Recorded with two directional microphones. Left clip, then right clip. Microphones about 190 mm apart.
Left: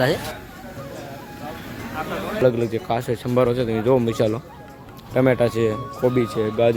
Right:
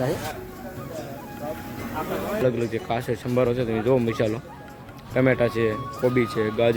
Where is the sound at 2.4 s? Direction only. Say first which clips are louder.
Left 7 dB; 20° left (ahead or behind).